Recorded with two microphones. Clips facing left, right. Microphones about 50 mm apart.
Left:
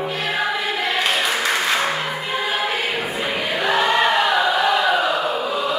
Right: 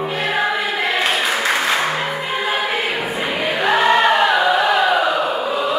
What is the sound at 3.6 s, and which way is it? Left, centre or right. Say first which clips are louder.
Choir: right 3 dB; centre.